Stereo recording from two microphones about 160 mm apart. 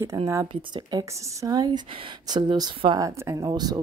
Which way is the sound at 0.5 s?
30° right (ahead or behind).